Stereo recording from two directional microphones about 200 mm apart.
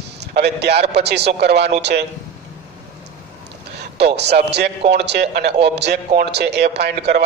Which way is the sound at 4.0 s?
55° right (ahead or behind).